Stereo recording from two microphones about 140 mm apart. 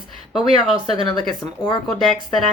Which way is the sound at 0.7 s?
45° right (ahead or behind).